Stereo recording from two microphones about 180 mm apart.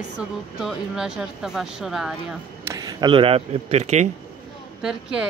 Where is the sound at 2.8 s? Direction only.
20° right (ahead or behind); by 4.1 s 35° right (ahead or behind).